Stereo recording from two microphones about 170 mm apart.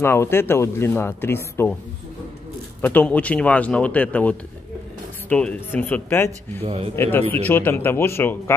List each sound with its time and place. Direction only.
0.0 s speech: 15° left (ahead or behind)
2.8 s speech: 10° left (ahead or behind)
6.5 s a man's voice: 35° right (ahead or behind)
7.0 s speech: 10° left (ahead or behind)